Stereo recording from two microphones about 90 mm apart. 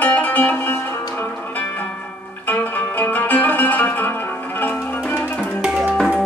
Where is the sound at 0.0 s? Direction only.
20° left (ahead or behind).